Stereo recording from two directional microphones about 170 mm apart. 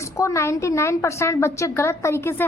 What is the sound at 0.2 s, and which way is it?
A woman's voice, 15° left (ahead or behind).